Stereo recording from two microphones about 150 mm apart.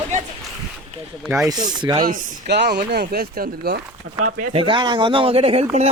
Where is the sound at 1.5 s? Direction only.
30° right (ahead or behind).